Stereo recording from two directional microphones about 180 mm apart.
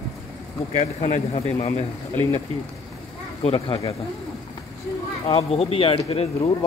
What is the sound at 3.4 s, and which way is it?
Speech, 25° left (ahead or behind).